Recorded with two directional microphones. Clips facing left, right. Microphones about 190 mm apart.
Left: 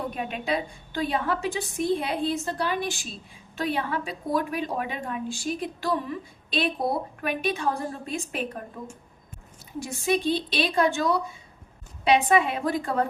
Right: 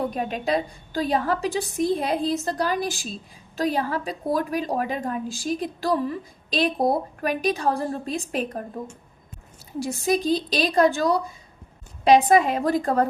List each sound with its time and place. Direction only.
0.1 s a woman's voice: 40° right (ahead or behind)
9.8 s a woman's voice: 40° right (ahead or behind)